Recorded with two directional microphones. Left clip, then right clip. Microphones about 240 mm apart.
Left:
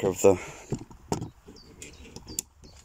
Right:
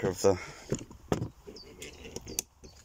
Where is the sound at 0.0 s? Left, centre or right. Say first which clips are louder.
Left 6 dB; centre.